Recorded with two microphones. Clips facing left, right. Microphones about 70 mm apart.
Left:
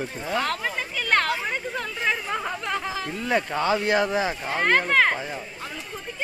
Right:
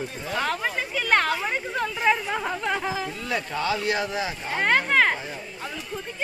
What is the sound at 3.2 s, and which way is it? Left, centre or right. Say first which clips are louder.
Speech: left 5 dB; left.